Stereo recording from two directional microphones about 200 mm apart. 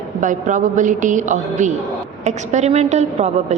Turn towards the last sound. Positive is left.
turn(degrees=-35)  # may be behind; listen again after turning